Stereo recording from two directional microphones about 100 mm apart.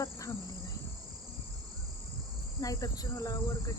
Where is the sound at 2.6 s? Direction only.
35° left (ahead or behind).